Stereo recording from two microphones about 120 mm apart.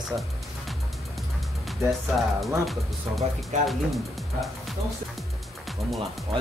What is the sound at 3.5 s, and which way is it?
Speech, 80° right.